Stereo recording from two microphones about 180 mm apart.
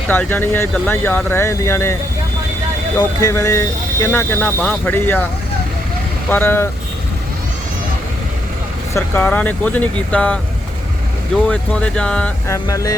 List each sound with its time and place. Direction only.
0.1 s speech: 10° left (ahead or behind)
3.0 s speech: 20° left (ahead or behind)
6.2 s speech: 10° left (ahead or behind)
9.0 s speech: 10° left (ahead or behind)
11.4 s speech: 10° left (ahead or behind)
12.5 s music: 20° left (ahead or behind)